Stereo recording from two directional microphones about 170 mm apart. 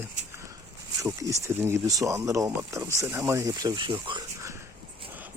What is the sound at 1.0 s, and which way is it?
Speech, 15° right (ahead or behind).